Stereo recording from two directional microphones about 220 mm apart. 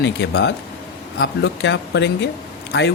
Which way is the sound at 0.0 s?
50° left (ahead or behind).